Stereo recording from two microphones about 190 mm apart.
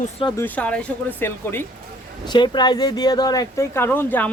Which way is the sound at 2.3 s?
25° left (ahead or behind).